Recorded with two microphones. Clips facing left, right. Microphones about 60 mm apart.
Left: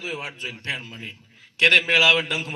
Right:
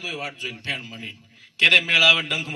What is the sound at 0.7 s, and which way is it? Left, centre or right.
Speech, centre.